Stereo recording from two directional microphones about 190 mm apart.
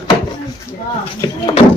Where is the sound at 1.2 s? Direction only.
25° left (ahead or behind).